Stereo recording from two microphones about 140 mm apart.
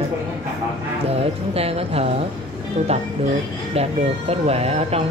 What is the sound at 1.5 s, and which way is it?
Speech, 45° right (ahead or behind).